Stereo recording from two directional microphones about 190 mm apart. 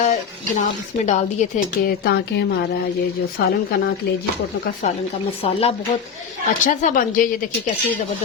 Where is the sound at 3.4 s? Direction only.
50° left (ahead or behind).